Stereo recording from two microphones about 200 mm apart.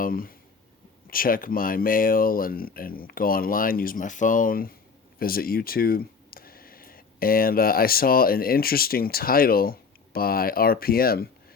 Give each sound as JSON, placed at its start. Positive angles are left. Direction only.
{"t": 0.0, "sound": "speech", "side_deg": 45}